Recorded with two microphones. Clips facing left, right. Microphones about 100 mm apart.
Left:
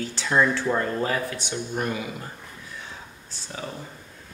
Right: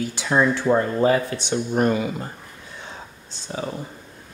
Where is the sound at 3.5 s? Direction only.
25° right (ahead or behind).